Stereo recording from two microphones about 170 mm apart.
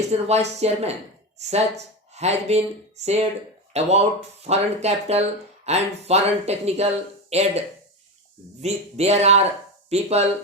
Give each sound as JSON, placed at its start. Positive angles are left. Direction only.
{"t": 0.1, "sound": "a woman's voice", "side_deg": -40}
{"t": 8.6, "sound": "speech", "side_deg": -40}